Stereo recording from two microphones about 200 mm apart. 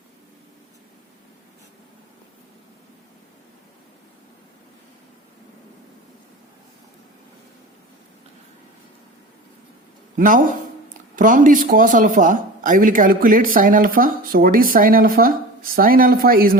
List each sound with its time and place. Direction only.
10.2 s speech: 40° right (ahead or behind)